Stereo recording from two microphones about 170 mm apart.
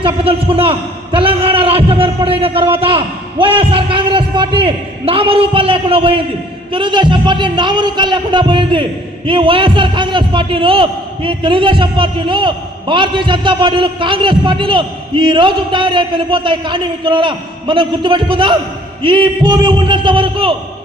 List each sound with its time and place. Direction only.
0.0 s a man's voice: 35° right (ahead or behind)